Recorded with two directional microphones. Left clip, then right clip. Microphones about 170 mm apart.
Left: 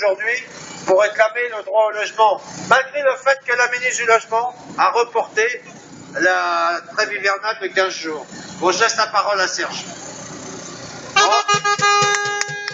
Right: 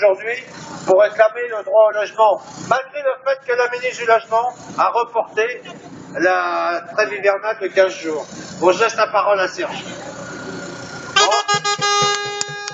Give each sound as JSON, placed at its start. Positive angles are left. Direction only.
{"t": 0.0, "sound": "a man's voice", "side_deg": -40}
{"t": 11.1, "sound": "music", "side_deg": -25}